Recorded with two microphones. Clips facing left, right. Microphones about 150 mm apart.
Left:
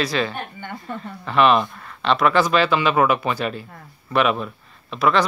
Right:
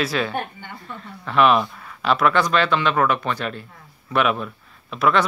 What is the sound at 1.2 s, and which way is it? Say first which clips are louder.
Speech: even; centre (ahead or behind).